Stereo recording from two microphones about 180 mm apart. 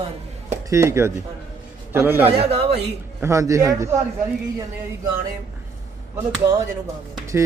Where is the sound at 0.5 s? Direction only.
15° right (ahead or behind).